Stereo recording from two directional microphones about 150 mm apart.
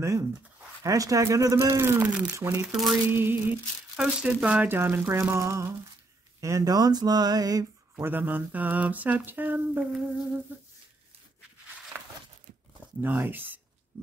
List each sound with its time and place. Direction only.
0.0 s speech: 20° right (ahead or behind)
2.3 s speech: 20° right (ahead or behind)
13.0 s speech: 15° right (ahead or behind)